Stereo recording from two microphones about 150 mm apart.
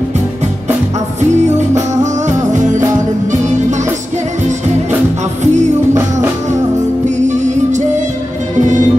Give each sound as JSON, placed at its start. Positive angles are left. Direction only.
{"t": 2.2, "sound": "music", "side_deg": -55}
{"t": 5.4, "sound": "music", "side_deg": -50}
{"t": 7.2, "sound": "music", "side_deg": -50}